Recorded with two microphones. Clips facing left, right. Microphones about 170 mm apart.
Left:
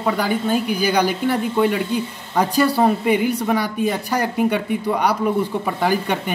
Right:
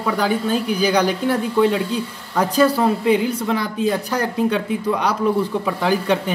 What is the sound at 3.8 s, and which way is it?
A man's voice, 15° left (ahead or behind).